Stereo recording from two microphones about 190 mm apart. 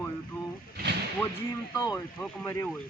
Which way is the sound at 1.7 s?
20° left (ahead or behind).